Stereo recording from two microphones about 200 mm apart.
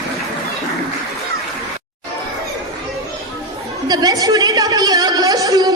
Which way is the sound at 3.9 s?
20° right (ahead or behind).